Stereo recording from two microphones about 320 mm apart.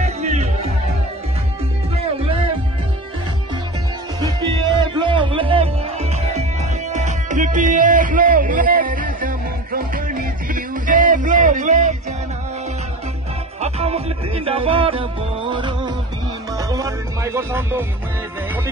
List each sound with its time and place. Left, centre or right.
0.0 s music: centre
4.2 s music: centre
13.6 s music: centre